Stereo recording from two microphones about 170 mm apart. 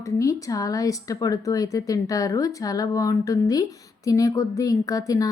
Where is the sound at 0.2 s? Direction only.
20° left (ahead or behind).